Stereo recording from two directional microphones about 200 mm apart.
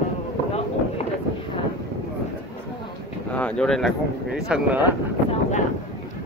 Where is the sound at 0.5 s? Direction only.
30° left (ahead or behind).